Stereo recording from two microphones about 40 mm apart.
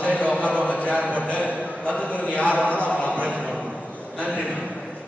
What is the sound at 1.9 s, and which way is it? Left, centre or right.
Chant, left.